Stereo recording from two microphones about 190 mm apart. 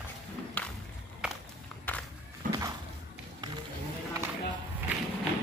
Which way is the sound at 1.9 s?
10° left (ahead or behind).